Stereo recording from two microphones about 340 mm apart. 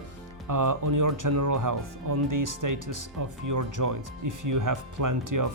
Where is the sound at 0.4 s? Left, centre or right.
Right.